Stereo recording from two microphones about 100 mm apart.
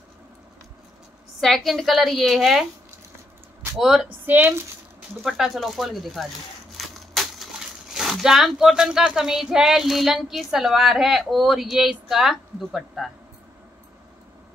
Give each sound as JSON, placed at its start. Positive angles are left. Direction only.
{"t": 1.4, "sound": "speech", "side_deg": 0}
{"t": 3.7, "sound": "speech", "side_deg": -5}
{"t": 4.3, "sound": "speech", "side_deg": -20}
{"t": 5.2, "sound": "speech", "side_deg": -5}
{"t": 6.8, "sound": "a sound", "side_deg": 0}
{"t": 7.9, "sound": "speech", "side_deg": 0}